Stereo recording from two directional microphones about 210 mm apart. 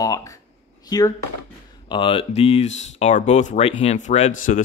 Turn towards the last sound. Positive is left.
turn(degrees=35)  # may be behind; listen again after turning